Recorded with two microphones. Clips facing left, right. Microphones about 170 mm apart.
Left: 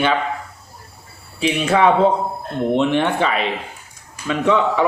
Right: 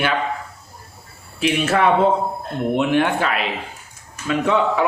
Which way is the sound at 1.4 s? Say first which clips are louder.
Left 2 dB; 5° right (ahead or behind).